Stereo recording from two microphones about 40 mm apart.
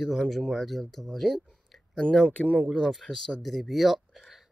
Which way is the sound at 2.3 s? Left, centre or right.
Left.